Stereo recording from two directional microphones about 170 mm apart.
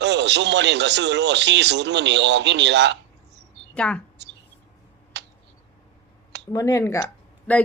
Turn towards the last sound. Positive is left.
turn(degrees=10)  # may be behind; listen again after turning